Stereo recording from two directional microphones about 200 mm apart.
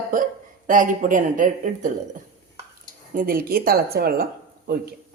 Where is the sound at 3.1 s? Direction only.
45° right (ahead or behind).